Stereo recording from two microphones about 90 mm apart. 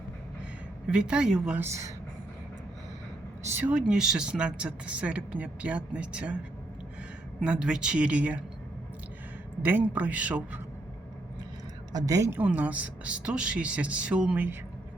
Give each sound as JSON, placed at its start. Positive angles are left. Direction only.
{"t": 0.9, "sound": "speech", "side_deg": -10}
{"t": 3.5, "sound": "speech", "side_deg": -15}
{"t": 7.4, "sound": "speech", "side_deg": -10}
{"t": 9.6, "sound": "speech", "side_deg": -20}
{"t": 11.9, "sound": "a woman's voice", "side_deg": -40}
{"t": 12.3, "sound": "speech", "side_deg": -20}